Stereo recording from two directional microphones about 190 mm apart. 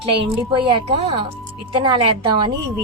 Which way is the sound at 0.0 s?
25° right (ahead or behind).